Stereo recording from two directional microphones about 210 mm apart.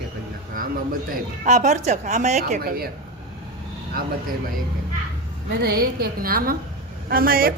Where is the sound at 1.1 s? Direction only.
35° right (ahead or behind).